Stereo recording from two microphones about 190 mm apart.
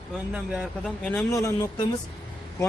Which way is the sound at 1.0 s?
10° left (ahead or behind).